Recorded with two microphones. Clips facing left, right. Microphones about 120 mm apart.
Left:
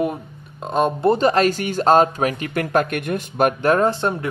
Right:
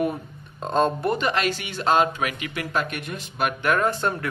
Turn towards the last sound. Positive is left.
turn(degrees=20)  # may be behind; listen again after turning